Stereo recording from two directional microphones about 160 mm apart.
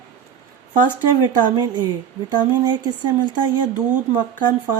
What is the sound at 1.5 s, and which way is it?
Speech, 25° right (ahead or behind).